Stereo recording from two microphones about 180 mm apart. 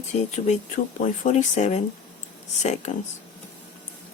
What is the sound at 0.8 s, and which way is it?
Speech, 55° left (ahead or behind).